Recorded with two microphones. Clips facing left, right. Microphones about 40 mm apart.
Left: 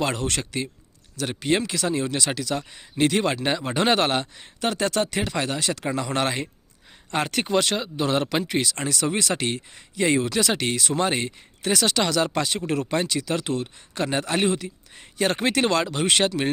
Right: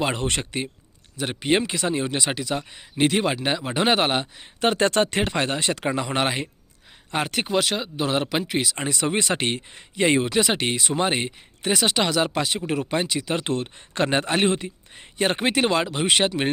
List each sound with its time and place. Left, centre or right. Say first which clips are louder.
0.2 s speech: right 1 dB; right
4.6 s speech: right 4 dB; right
6.1 s speech: right 1 dB; centre
8.7 s speech: right 1 dB; right
13.4 s speech: right 1 dB; right
14.9 s speech: even; right